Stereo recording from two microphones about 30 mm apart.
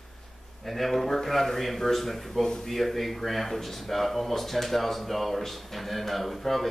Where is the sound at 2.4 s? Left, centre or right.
Centre.